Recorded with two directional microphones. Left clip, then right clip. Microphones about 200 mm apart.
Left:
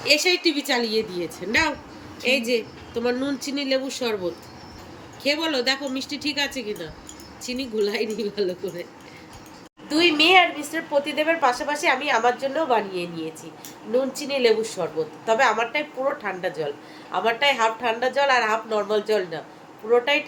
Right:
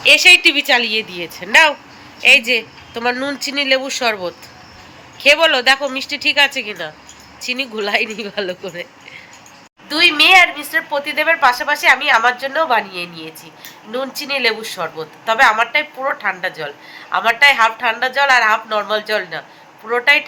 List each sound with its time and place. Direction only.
0.0 s speech: centre (ahead or behind)
9.9 s speech: 10° left (ahead or behind)